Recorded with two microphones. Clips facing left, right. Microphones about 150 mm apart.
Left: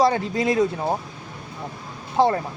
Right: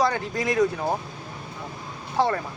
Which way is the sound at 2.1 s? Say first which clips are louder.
Left 4 dB; 25° left (ahead or behind).